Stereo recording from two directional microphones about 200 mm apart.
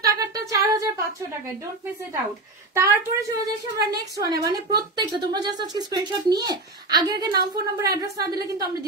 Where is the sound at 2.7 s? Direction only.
15° right (ahead or behind).